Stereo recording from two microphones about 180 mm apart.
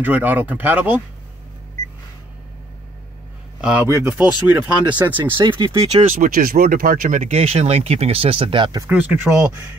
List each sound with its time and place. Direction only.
0.0 s speech: 10° right (ahead or behind)
3.6 s speech: 10° right (ahead or behind)
5.4 s speech: 25° right (ahead or behind)
6.1 s speech: 50° right (ahead or behind); by 8.8 s 25° right (ahead or behind)
8.8 s speech: 10° right (ahead or behind)